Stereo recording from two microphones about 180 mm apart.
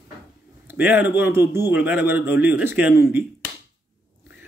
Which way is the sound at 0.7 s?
10° right (ahead or behind).